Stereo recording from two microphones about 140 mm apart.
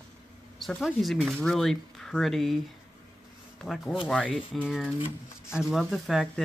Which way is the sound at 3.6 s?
Centre (ahead or behind).